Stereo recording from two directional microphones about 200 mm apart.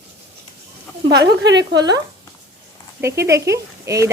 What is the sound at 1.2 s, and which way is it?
Speech, 55° right (ahead or behind).